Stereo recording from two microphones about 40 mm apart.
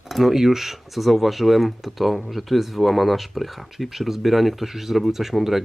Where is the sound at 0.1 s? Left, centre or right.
Centre.